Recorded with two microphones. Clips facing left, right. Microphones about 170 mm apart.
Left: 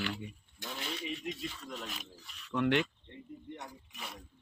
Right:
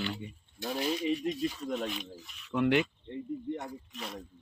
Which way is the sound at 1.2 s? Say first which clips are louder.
Right 8 dB; 30° right (ahead or behind).